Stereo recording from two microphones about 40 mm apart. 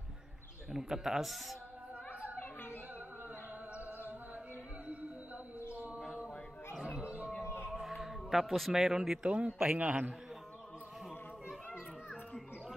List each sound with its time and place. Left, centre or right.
0.7 s speech: centre
6.8 s music: right
7.8 s music: centre
8.5 s a man's voice: centre
8.8 s speech: centre
9.2 s a man's voice: right
9.8 s a man's voice: right